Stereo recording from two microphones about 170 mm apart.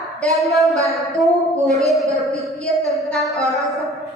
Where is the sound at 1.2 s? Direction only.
Centre (ahead or behind).